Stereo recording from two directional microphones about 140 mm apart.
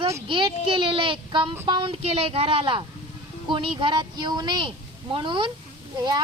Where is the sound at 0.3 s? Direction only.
35° right (ahead or behind).